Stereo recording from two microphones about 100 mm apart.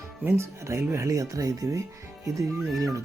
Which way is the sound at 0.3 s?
25° right (ahead or behind).